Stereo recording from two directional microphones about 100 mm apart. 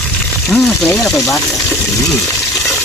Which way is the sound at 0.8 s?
5° left (ahead or behind).